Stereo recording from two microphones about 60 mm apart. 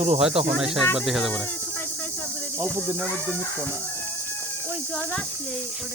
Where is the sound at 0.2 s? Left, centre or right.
Centre.